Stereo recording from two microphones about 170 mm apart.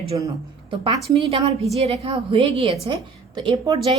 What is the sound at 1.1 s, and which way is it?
A woman's voice, 35° right (ahead or behind).